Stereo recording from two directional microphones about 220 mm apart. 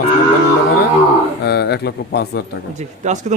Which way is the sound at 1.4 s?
45° left (ahead or behind).